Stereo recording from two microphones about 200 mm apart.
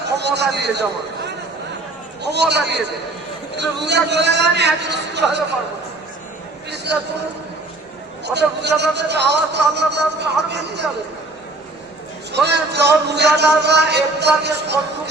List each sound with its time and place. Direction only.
0.0 s a man's voice: 55° right (ahead or behind)
8.2 s speech: 55° right (ahead or behind)
12.3 s speech: 55° right (ahead or behind)